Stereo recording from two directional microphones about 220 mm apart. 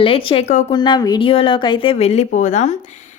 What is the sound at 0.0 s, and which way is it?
A woman's voice, 25° left (ahead or behind).